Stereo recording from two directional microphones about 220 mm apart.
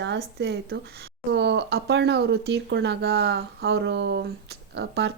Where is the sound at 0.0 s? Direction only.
50° right (ahead or behind).